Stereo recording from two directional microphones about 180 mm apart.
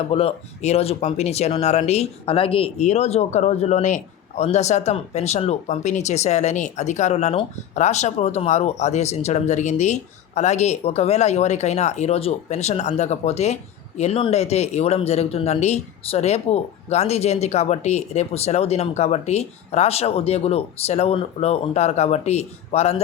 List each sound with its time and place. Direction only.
0.1 s speech: 35° left (ahead or behind)